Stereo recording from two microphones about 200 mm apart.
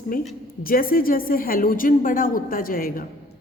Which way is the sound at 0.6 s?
45° left (ahead or behind).